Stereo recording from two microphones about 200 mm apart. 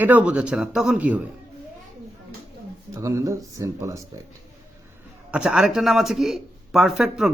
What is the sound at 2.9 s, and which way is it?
Speech, 15° right (ahead or behind).